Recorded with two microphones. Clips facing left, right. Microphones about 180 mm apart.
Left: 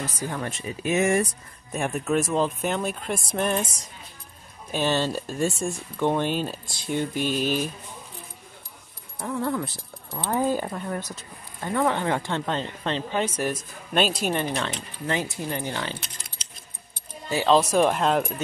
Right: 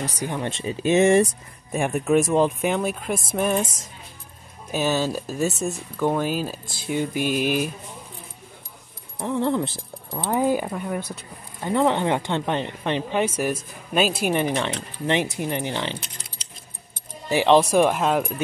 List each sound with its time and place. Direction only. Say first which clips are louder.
0.2 s speech: right 5 dB; 20° right (ahead or behind)
1.7 s speech: right 5 dB; 10° right (ahead or behind)
4.6 s speech: right 1 dB; 5° right (ahead or behind)
9.2 s speech: right 4 dB; 25° right (ahead or behind)
10.1 s speech: right 3 dB; 15° right (ahead or behind)
17.3 s speech: right 3 dB; 15° right (ahead or behind)